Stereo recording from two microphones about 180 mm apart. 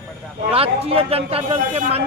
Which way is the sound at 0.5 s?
35° right (ahead or behind).